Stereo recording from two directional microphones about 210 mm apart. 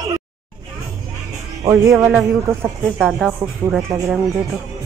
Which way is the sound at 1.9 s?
5° right (ahead or behind).